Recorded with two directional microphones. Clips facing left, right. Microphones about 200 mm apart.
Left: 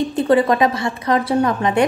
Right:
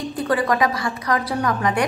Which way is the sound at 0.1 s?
25° left (ahead or behind).